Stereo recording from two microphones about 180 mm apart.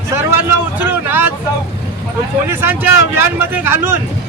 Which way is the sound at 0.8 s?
10° right (ahead or behind).